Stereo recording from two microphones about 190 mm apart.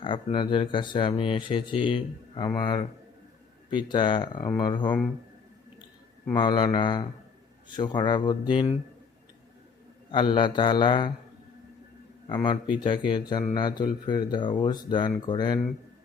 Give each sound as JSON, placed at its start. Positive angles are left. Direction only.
{"t": 0.0, "sound": "speech", "side_deg": 25}
{"t": 6.3, "sound": "speech", "side_deg": 25}
{"t": 10.1, "sound": "speech", "side_deg": 25}
{"t": 12.3, "sound": "speech", "side_deg": 25}